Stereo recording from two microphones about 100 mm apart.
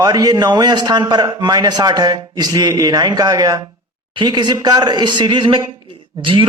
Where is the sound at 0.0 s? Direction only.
40° right (ahead or behind).